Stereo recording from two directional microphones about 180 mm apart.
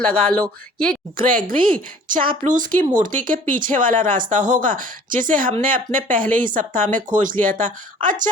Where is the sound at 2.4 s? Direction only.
45° right (ahead or behind).